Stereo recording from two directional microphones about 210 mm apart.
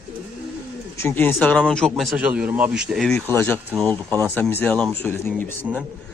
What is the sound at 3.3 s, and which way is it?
Speech, 10° left (ahead or behind).